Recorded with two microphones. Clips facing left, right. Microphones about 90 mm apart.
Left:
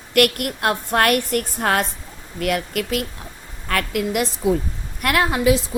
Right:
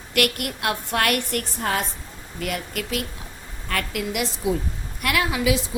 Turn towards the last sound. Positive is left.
turn(degrees=45)  # may be behind; listen again after turning